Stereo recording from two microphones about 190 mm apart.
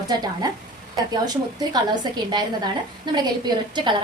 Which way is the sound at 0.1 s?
20° right (ahead or behind).